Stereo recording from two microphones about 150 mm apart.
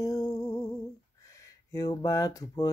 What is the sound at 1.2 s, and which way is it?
Speech, 20° left (ahead or behind).